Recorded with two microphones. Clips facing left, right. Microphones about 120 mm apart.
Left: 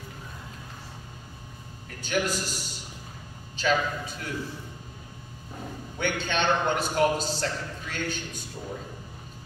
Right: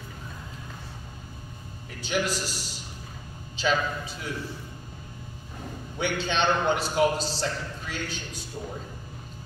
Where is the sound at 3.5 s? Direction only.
45° left (ahead or behind).